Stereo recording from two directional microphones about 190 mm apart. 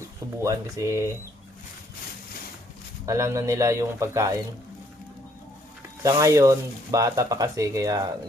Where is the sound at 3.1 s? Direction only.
15° right (ahead or behind).